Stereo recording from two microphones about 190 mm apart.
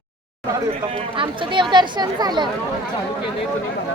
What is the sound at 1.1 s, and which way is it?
Chatter, 25° right (ahead or behind).